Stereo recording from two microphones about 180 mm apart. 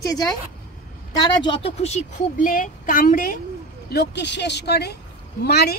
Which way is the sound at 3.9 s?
70° left (ahead or behind).